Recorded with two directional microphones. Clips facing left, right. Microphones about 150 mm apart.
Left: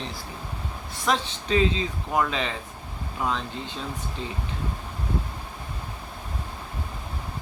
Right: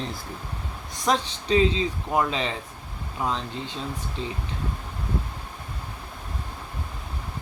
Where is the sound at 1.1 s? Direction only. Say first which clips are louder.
Right 2 dB; 30° right (ahead or behind).